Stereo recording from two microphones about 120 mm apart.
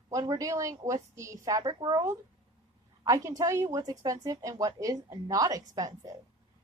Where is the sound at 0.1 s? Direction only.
30° right (ahead or behind).